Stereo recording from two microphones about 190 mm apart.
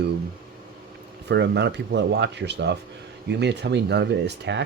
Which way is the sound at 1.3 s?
65° right (ahead or behind).